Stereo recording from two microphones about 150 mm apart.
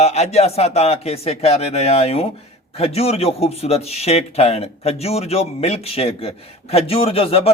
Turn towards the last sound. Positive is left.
turn(degrees=40)  # may be behind; listen again after turning